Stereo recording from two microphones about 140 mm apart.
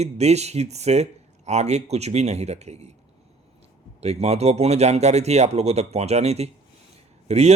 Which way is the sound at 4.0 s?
50° right (ahead or behind).